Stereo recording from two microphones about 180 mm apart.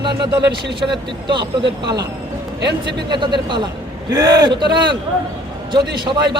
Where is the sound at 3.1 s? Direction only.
25° right (ahead or behind).